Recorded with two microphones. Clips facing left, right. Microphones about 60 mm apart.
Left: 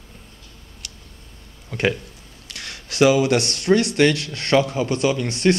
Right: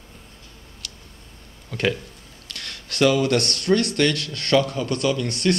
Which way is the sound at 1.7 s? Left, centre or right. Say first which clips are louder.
Left 2 dB; centre.